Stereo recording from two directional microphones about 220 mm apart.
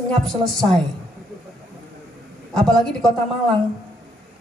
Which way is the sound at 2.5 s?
Centre (ahead or behind).